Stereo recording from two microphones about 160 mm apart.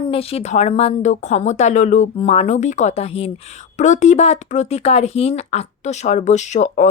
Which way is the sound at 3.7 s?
50° left (ahead or behind).